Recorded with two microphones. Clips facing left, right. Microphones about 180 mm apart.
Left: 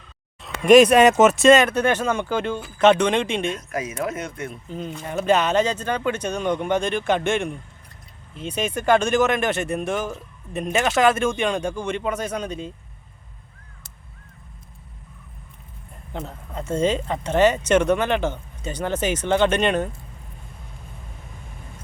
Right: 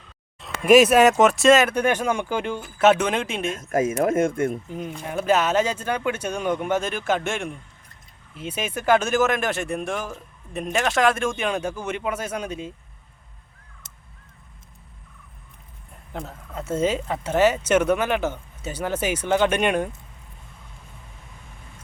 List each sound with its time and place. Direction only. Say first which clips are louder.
0.4 s speech: left 2 dB; 5° right (ahead or behind)
3.6 s speech: right 6 dB; 50° right (ahead or behind)
4.7 s speech: left 1 dB; 10° right (ahead or behind)
16.1 s speech: left 1 dB; 5° right (ahead or behind)